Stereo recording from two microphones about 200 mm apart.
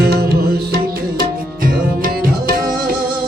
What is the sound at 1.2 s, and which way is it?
Tabla, 45° right (ahead or behind).